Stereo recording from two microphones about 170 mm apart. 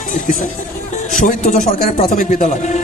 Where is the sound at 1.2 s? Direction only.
50° left (ahead or behind).